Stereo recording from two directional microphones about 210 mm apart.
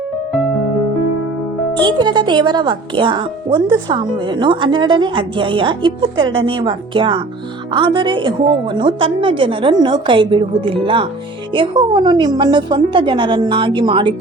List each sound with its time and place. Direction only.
1.8 s speech: 20° right (ahead or behind)